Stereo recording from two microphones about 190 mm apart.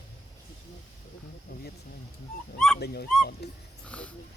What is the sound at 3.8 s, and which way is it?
Speech, 5° left (ahead or behind).